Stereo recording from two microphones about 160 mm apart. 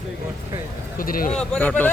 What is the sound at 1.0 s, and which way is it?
Speech, 60° left (ahead or behind).